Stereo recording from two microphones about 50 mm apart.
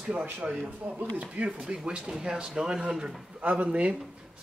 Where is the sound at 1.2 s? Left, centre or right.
Right.